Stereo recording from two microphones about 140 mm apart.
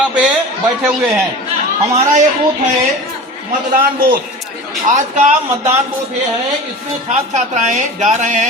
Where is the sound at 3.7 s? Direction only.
90° right.